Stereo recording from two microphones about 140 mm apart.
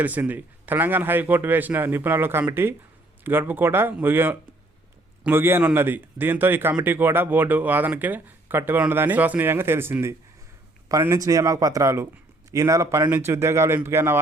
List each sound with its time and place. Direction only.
0.0 s a man's voice: 10° right (ahead or behind)